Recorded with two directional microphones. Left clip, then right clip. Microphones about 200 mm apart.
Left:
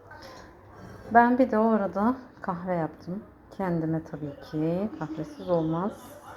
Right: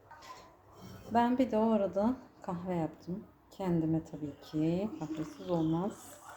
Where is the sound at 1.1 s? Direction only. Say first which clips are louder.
Left 9 dB; 10° left (ahead or behind).